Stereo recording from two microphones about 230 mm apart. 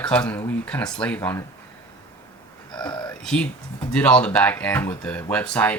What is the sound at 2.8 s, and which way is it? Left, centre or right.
Whispering, centre.